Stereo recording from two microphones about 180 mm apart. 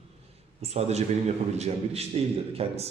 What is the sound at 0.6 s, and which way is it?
A man's voice, 35° right (ahead or behind).